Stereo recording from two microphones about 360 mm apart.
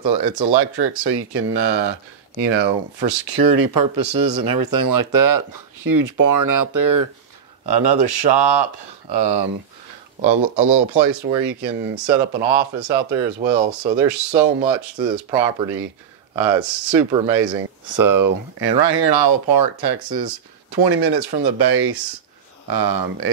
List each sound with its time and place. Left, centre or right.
0.0 s speech: right
3.0 s speech: right
7.6 s speech: right
11.2 s speech: centre
17.8 s speech: right